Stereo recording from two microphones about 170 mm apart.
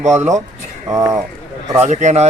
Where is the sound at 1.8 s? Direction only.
45° right (ahead or behind).